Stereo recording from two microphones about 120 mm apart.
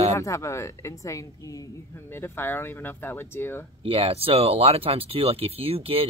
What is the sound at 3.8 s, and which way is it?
Speech, 50° right (ahead or behind).